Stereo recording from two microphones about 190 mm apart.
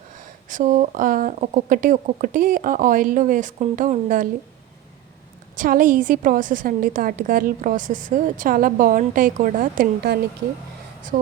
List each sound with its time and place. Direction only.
0.4 s a woman's voice: 40° right (ahead or behind)
5.5 s a woman's voice: 45° right (ahead or behind)